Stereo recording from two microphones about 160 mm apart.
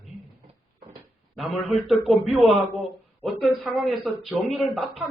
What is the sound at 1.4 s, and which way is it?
Speech, centre (ahead or behind).